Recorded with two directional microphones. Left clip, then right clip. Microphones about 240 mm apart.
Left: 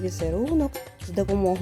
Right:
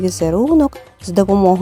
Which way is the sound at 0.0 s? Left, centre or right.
Right.